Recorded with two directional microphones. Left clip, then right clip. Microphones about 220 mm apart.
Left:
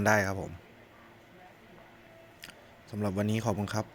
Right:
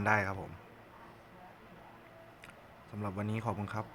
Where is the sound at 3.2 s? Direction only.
35° left (ahead or behind).